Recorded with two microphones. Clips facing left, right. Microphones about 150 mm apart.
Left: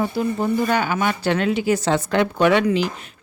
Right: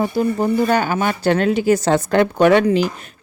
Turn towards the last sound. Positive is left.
turn(degrees=-45)  # may be behind; listen again after turning